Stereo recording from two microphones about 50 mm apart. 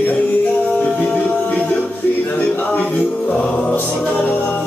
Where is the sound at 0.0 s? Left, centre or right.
Left.